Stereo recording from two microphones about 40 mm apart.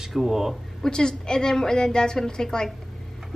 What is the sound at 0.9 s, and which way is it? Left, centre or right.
A woman's voice, centre.